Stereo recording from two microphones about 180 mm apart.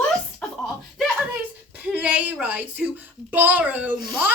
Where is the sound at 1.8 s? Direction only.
10° right (ahead or behind).